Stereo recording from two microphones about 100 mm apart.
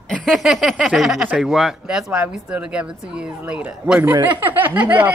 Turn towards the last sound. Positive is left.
turn(degrees=-15)  # may be behind; listen again after turning